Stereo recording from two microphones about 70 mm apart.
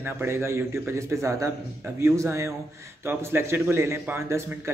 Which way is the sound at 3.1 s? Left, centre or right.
Right.